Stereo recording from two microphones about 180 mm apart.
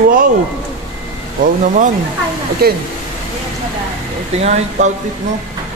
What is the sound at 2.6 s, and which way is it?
Speech, 60° right (ahead or behind).